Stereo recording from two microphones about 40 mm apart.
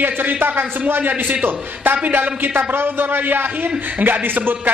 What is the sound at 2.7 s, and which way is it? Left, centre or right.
A man's voice, right.